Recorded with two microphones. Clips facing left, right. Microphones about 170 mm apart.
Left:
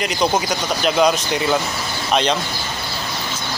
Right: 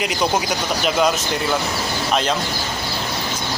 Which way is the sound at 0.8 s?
Centre (ahead or behind).